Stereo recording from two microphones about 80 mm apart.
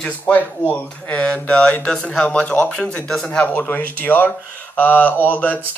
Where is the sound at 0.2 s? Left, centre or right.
Left.